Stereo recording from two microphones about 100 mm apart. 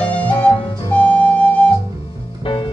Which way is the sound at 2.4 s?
55° left (ahead or behind).